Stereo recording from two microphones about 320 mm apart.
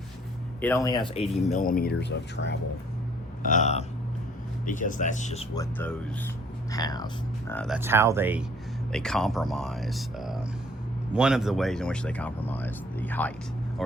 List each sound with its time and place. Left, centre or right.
0.6 s speech: centre
6.7 s speech: centre